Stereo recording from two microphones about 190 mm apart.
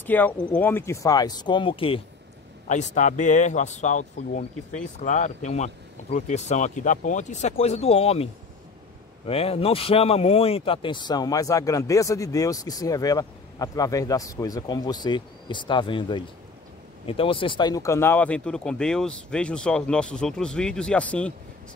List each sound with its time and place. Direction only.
0.0 s speech: 10° left (ahead or behind); by 2.0 s 25° left (ahead or behind)
2.7 s speech: 40° left (ahead or behind)
9.3 s speech: 30° left (ahead or behind); by 21.3 s 5° left (ahead or behind)